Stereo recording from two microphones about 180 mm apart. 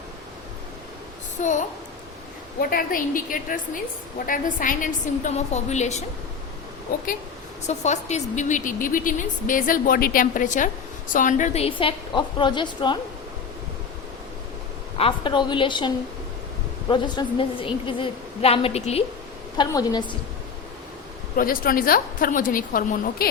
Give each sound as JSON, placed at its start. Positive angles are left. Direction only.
{"t": 1.4, "sound": "a woman's voice", "side_deg": 45}
{"t": 2.6, "sound": "a woman's voice", "side_deg": 55}
{"t": 7.7, "sound": "a woman's voice", "side_deg": 40}
{"t": 14.9, "sound": "a woman's voice", "side_deg": 30}
{"t": 16.9, "sound": "a woman's voice", "side_deg": 25}
{"t": 19.5, "sound": "a woman's voice", "side_deg": 25}
{"t": 21.3, "sound": "a woman's voice", "side_deg": 50}